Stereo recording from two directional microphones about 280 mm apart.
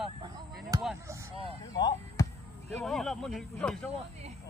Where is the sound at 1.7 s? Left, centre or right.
Centre.